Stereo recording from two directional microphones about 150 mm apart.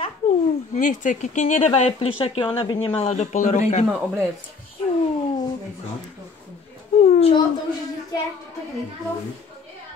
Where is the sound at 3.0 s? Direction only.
50° left (ahead or behind).